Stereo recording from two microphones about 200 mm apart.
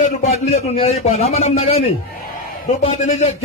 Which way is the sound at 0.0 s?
30° left (ahead or behind).